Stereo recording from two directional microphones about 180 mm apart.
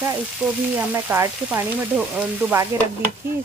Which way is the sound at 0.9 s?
15° right (ahead or behind).